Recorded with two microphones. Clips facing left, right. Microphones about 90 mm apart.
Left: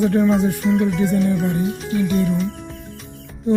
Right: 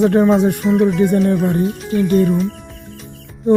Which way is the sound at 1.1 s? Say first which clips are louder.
Right 4 dB; 55° right (ahead or behind).